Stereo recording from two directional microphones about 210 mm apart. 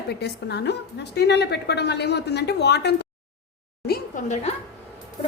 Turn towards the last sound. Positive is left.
turn(degrees=30)  # may be behind; listen again after turning